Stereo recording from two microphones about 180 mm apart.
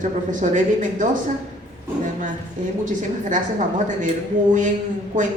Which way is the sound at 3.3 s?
45° right (ahead or behind).